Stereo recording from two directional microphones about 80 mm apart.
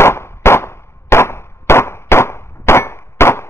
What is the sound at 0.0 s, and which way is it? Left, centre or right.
Firecracker, left.